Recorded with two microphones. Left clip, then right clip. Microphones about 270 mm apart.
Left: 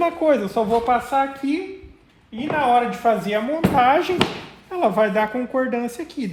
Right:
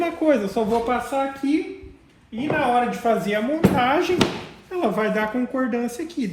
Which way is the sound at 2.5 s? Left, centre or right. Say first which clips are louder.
Left 2 dB; left.